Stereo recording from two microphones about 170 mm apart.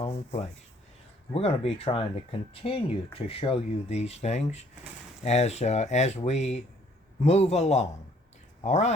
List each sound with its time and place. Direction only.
0.0 s speech: 40° left (ahead or behind)